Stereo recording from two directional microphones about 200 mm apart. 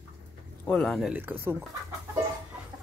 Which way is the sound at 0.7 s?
5° left (ahead or behind).